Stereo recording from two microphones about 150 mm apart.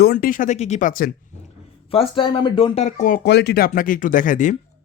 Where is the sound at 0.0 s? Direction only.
80° left.